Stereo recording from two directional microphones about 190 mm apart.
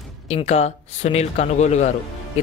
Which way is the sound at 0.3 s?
35° left (ahead or behind).